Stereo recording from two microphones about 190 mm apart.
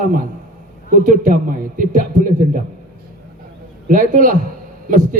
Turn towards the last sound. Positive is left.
turn(degrees=-45)  # may be behind; listen again after turning